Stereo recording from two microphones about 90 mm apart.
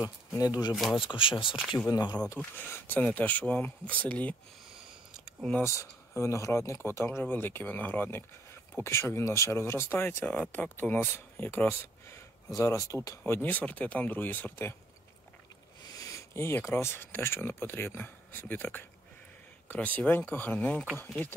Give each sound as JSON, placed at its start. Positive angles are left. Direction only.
{"t": 0.4, "sound": "speech", "side_deg": 45}
{"t": 0.9, "sound": "speech", "side_deg": 70}
{"t": 1.9, "sound": "speech", "side_deg": 50}
{"t": 2.5, "sound": "speech", "side_deg": 20}
{"t": 5.6, "sound": "speech", "side_deg": 35}
{"t": 13.2, "sound": "speech", "side_deg": 20}
{"t": 15.9, "sound": "speech", "side_deg": 35}